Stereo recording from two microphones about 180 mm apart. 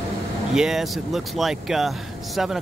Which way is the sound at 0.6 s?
Centre (ahead or behind).